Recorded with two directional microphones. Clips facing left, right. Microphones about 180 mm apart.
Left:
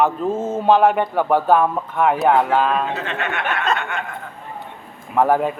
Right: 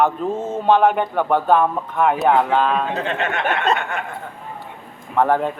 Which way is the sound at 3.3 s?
40° right (ahead or behind).